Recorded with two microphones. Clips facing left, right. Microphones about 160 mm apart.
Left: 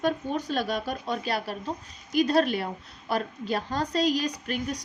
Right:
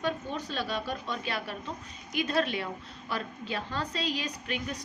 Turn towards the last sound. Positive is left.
turn(degrees=40)  # may be behind; listen again after turning